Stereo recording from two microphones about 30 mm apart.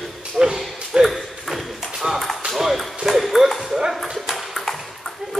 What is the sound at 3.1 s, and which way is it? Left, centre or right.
Ping, centre.